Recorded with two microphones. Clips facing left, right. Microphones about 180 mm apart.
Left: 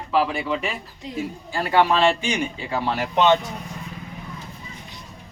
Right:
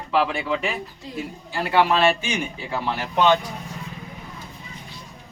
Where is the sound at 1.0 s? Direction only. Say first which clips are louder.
Left 8 dB; 20° left (ahead or behind).